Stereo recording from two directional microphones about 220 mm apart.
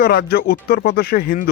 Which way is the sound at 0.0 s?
45° left (ahead or behind).